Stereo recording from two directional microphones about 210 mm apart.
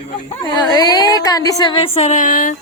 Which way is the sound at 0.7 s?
20° left (ahead or behind).